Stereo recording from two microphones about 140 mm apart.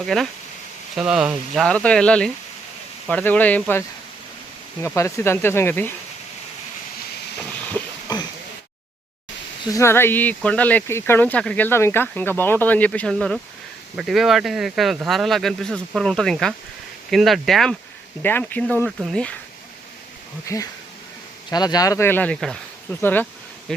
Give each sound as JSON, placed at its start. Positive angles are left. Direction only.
{"t": 0.0, "sound": "speech", "side_deg": 0}
{"t": 4.9, "sound": "speech", "side_deg": 20}
{"t": 8.1, "sound": "a sound", "side_deg": 30}
{"t": 9.7, "sound": "speech", "side_deg": 20}
{"t": 18.2, "sound": "speech", "side_deg": 15}
{"t": 18.9, "sound": "speech", "side_deg": 0}
{"t": 20.4, "sound": "speech", "side_deg": 20}